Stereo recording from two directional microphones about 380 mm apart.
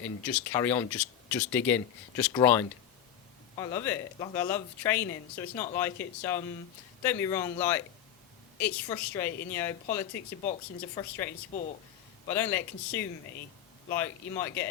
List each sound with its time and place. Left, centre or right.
0.0 s speech: centre
10.2 s speech: centre
12.3 s speech: centre